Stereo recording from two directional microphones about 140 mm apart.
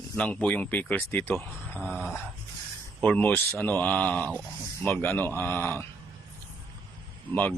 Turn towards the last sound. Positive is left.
turn(degrees=10)  # may be behind; listen again after turning